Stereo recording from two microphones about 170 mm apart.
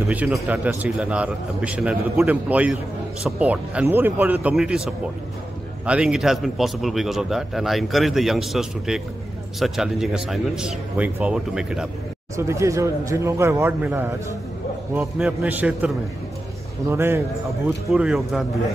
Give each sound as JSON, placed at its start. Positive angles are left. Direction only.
{"t": 0.1, "sound": "a man's voice", "side_deg": -10}
{"t": 12.4, "sound": "a man's voice", "side_deg": -15}
{"t": 16.9, "sound": "a man's voice", "side_deg": -15}